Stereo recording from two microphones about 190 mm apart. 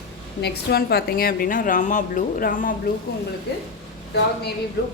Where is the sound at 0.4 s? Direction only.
55° left (ahead or behind).